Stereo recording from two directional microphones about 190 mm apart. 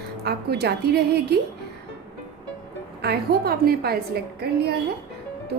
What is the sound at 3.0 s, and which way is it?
A woman's voice, 55° right (ahead or behind).